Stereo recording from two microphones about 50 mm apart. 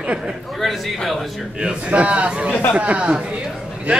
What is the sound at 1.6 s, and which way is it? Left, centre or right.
Speech, right.